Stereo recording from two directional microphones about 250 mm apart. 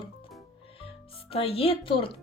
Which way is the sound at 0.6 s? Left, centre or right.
Left.